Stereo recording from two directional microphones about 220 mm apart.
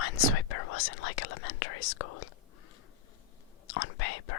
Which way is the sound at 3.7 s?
90° left.